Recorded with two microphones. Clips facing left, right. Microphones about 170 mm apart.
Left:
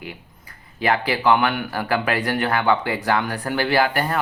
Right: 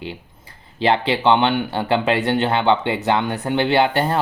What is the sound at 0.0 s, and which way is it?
Speech, 25° right (ahead or behind).